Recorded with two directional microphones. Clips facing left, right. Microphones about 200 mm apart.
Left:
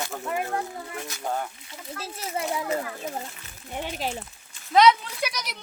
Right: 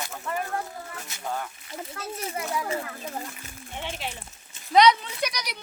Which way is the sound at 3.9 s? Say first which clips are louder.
Left 5 dB; 40° left (ahead or behind).